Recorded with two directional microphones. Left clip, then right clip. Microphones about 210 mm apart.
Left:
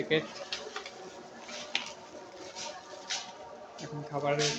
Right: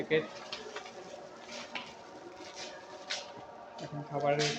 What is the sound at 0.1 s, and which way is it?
Speech, 25° left (ahead or behind).